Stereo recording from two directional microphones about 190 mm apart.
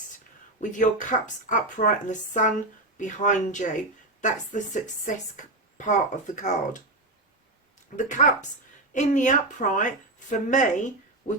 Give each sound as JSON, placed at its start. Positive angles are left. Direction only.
{"t": 0.6, "sound": "speech", "side_deg": 40}
{"t": 7.9, "sound": "speech", "side_deg": 40}